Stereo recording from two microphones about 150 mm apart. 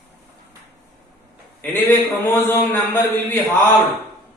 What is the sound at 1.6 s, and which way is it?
A man's voice, 10° left (ahead or behind).